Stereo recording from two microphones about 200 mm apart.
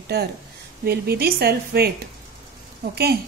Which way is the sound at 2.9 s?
55° right (ahead or behind).